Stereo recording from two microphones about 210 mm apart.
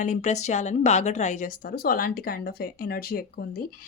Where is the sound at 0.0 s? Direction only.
35° left (ahead or behind).